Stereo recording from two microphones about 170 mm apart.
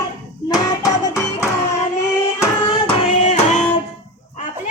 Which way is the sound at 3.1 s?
40° left (ahead or behind).